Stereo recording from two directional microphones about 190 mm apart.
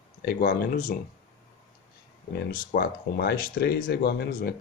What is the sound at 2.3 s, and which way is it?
Speech, 55° left (ahead or behind).